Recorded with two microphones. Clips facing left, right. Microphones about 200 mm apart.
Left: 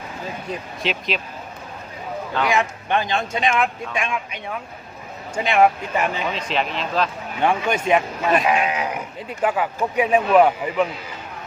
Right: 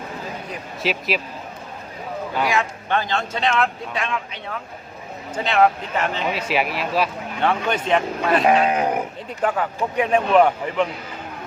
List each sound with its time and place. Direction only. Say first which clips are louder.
0.8 s speech: right 3 dB; 5° right (ahead or behind)
2.5 s a man's voice: left 4 dB; 15° left (ahead or behind)
6.3 s speech: right 2 dB; 10° right (ahead or behind)
7.4 s a man's voice: left 1 dB; 10° left (ahead or behind)
8.7 s speech: right 5 dB; 50° right (ahead or behind)
9.4 s a man's voice: left 1 dB; 5° left (ahead or behind)